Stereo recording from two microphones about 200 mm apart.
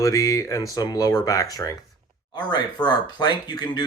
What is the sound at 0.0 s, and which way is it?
Speech, 15° left (ahead or behind).